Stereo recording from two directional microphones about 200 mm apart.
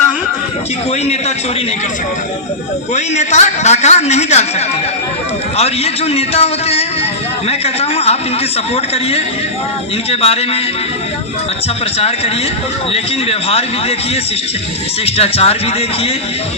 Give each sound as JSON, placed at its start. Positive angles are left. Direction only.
{"t": 2.9, "sound": "a man's voice", "side_deg": 35}
{"t": 5.5, "sound": "a man's voice", "side_deg": 30}
{"t": 11.9, "sound": "a man's voice", "side_deg": 30}
{"t": 15.0, "sound": "a man's voice", "side_deg": 30}